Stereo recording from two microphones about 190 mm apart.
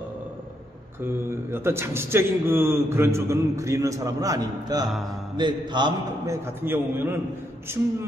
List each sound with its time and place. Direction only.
1.0 s speech: 10° right (ahead or behind)